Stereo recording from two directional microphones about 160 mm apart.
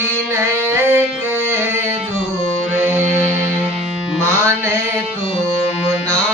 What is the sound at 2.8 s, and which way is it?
Music, 10° right (ahead or behind).